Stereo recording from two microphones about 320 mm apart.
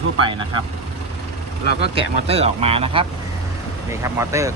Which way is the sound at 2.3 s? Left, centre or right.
Centre.